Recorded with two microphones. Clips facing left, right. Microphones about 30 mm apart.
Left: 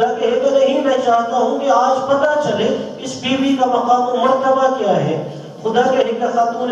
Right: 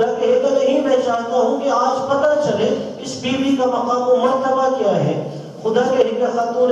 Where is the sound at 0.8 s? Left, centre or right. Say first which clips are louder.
Left 2 dB; left.